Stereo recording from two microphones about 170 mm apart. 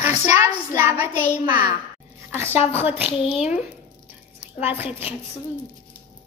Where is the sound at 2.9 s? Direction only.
30° left (ahead or behind).